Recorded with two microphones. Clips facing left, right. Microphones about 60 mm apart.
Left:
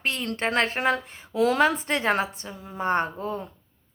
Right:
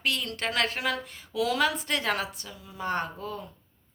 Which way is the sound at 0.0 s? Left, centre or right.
Left.